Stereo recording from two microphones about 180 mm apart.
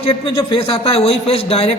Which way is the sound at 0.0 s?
30° left (ahead or behind).